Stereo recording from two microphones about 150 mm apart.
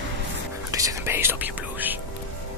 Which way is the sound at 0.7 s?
20° right (ahead or behind).